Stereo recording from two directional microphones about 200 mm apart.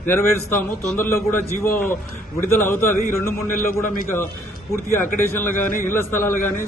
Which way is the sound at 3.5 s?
40° left (ahead or behind).